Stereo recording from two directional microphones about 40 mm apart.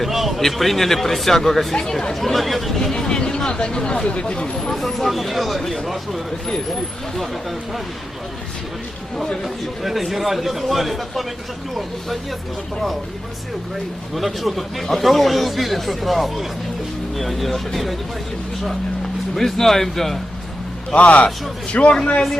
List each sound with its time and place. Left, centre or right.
0.0 s a man's voice: centre
2.2 s a man's voice: centre
2.9 s speech: centre
4.5 s a man's voice: centre
9.2 s speech: centre
9.8 s a man's voice: centre
14.2 s a man's voice: centre
19.4 s speech: centre
20.9 s a man's voice: left